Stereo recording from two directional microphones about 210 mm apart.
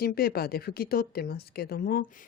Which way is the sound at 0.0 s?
45° left (ahead or behind).